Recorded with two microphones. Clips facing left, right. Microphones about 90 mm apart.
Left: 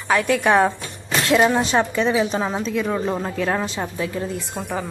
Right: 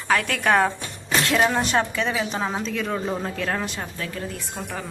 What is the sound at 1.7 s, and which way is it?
Speech, 20° left (ahead or behind).